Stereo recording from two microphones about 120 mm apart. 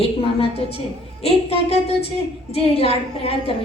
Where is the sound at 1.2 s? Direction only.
60° left (ahead or behind).